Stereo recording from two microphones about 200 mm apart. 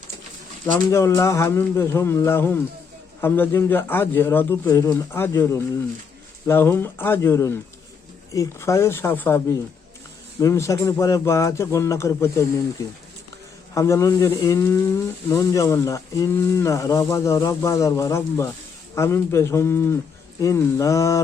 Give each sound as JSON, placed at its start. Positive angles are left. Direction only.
{"t": 0.9, "sound": "speech", "side_deg": 15}